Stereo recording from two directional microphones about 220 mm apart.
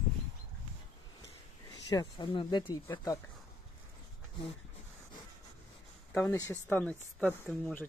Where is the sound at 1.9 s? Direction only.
20° left (ahead or behind).